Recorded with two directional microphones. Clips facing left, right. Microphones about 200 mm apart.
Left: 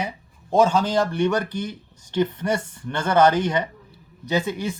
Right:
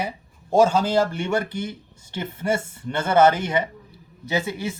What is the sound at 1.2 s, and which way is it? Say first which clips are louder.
Speech: left 2 dB; 25° right (ahead or behind).